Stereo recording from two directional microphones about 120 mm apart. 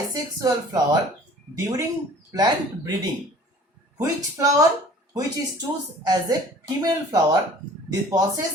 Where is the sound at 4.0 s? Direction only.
30° right (ahead or behind).